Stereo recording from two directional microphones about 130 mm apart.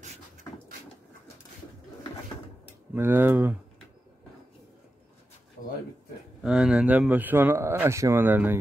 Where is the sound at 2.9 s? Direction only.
15° right (ahead or behind).